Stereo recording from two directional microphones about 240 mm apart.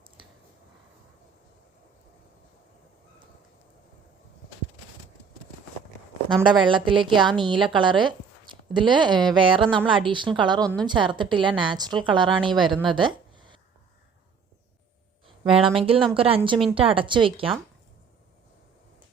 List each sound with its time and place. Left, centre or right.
6.5 s a woman's voice: centre
15.4 s a woman's voice: right